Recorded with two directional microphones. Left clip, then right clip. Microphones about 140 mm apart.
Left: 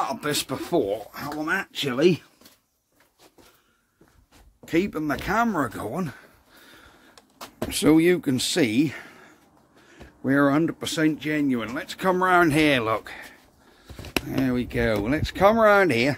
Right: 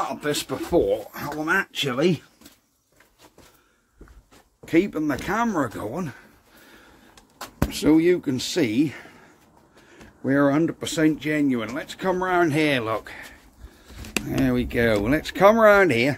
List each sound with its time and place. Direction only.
0.0 s speech: 35° left (ahead or behind)
0.8 s speech: 5° left (ahead or behind)
4.6 s speech: 20° left (ahead or behind); by 6.9 s 35° left (ahead or behind)
7.7 s speech: 55° left (ahead or behind); by 9.3 s 40° left (ahead or behind)
10.2 s speech: 25° left (ahead or behind)
14.2 s speech: centre (ahead or behind); by 16.2 s 15° left (ahead or behind)